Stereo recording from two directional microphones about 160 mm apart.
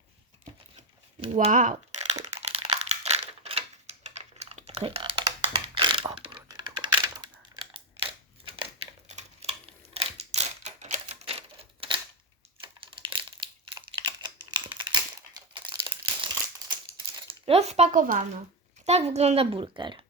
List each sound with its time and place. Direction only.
0.8 s crumpling: 45° right (ahead or behind)
5.5 s a sound: 30° right (ahead or behind)
9.0 s typewriter: 45° right (ahead or behind)
12.6 s crumpling: 30° right (ahead or behind)
17.2 s a sound: 35° right (ahead or behind)
18.0 s a child's voice: 60° right (ahead or behind)
18.9 s a woman's voice: 40° right (ahead or behind)